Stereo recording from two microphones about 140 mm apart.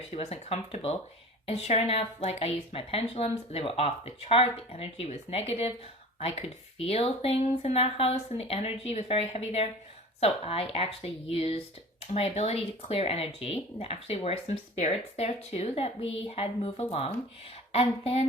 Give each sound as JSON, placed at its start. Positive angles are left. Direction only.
{"t": 0.1, "sound": "a woman's voice", "side_deg": 50}